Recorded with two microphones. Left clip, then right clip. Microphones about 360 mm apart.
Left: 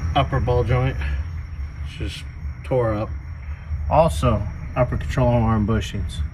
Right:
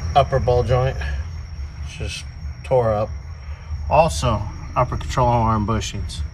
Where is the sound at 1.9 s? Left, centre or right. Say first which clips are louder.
Right 2 dB; centre.